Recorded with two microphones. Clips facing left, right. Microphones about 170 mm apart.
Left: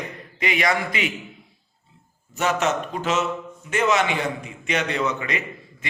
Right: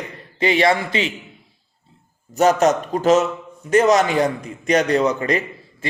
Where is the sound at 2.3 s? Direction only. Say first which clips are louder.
Right 7 dB; 40° right (ahead or behind).